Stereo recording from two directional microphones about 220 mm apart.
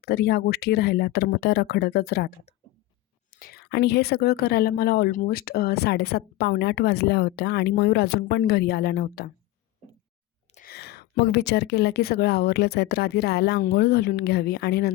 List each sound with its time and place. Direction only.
0.0 s a woman's voice: 45° left (ahead or behind)
3.3 s a woman's voice: 45° left (ahead or behind)
10.5 s a woman's voice: 40° left (ahead or behind)